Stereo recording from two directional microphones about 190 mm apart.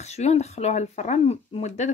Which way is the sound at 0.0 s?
35° left (ahead or behind).